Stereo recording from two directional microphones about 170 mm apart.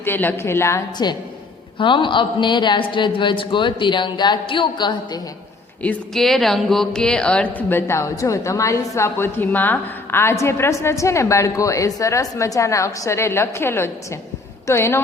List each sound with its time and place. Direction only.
0.0 s speech: 10° left (ahead or behind)
5.8 s speech: 5° left (ahead or behind)